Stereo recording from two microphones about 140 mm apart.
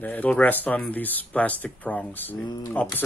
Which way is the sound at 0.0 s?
10° left (ahead or behind).